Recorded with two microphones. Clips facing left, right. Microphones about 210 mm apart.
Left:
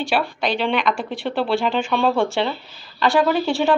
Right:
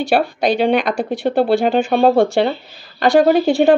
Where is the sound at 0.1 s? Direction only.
40° right (ahead or behind).